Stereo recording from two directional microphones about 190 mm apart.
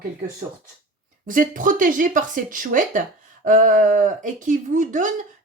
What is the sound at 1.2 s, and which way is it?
Speech, 45° right (ahead or behind).